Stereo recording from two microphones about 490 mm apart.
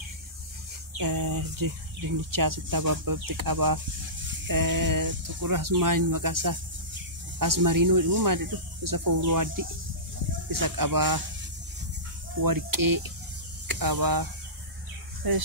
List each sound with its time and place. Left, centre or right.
0.9 s speech: right
12.4 s speech: right